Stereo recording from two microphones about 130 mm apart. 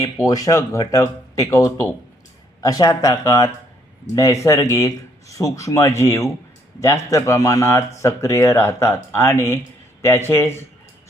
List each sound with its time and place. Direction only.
0.3 s speech: 25° left (ahead or behind)